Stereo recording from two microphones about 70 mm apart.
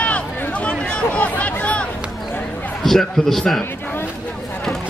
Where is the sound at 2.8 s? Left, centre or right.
Centre.